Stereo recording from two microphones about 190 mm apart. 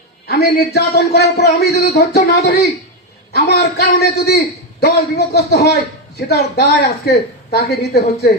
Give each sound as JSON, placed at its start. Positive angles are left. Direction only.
{"t": 0.3, "sound": "a man's voice", "side_deg": 55}